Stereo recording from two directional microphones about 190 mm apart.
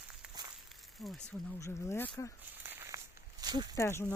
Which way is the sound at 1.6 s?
15° left (ahead or behind).